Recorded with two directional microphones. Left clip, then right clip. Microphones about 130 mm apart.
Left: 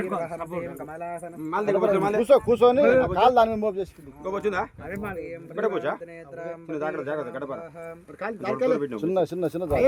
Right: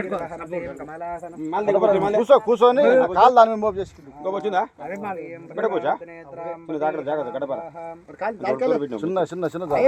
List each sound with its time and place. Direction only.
0.0 s a man's voice: 25° left (ahead or behind)
6.4 s a man's voice: 45° left (ahead or behind)
9.0 s a man's voice: 30° left (ahead or behind)